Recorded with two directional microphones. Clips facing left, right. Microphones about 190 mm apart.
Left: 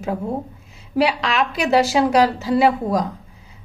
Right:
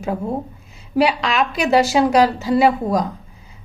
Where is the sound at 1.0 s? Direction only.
15° right (ahead or behind).